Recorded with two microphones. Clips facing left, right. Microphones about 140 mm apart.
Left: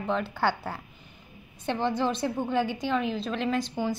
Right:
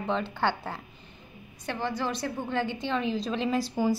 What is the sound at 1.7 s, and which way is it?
A woman's voice, 20° left (ahead or behind).